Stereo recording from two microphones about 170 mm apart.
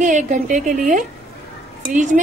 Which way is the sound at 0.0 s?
45° right (ahead or behind).